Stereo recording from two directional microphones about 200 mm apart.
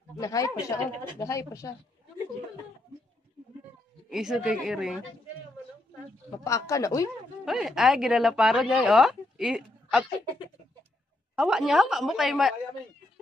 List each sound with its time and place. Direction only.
0.1 s speech: 15° left (ahead or behind)
4.1 s a woman's voice: centre (ahead or behind)
6.7 s speech: 15° left (ahead or behind)
7.4 s speech: centre (ahead or behind)
11.3 s a woman's voice: 5° right (ahead or behind)